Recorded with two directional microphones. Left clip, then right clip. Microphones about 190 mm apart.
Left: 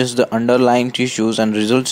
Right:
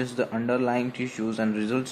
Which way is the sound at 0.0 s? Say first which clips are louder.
Left 12 dB; 40° left (ahead or behind).